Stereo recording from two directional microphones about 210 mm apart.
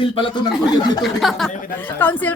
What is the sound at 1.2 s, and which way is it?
Speech, centre (ahead or behind).